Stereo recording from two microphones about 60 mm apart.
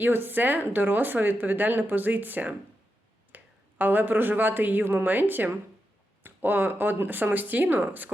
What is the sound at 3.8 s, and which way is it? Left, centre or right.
Speech, right.